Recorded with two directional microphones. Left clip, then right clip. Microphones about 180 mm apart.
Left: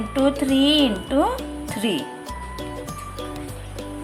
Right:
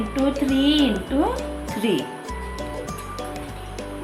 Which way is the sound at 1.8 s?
20° left (ahead or behind).